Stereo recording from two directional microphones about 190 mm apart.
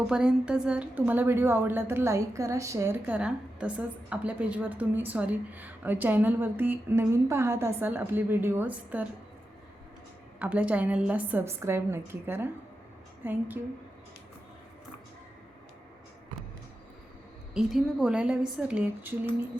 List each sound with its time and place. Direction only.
0.1 s a woman's voice: 5° right (ahead or behind)
10.4 s a woman's voice: 5° right (ahead or behind)
17.5 s speech: 5° right (ahead or behind)